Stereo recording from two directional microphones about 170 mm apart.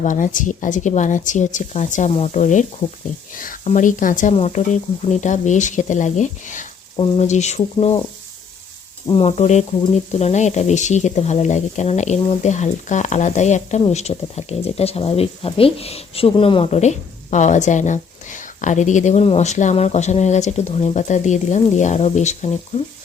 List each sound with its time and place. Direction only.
0.0 s a woman's voice: 50° left (ahead or behind)
9.0 s a woman's voice: 35° left (ahead or behind)